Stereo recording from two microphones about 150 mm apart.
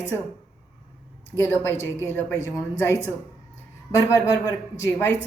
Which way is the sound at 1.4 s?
15° left (ahead or behind).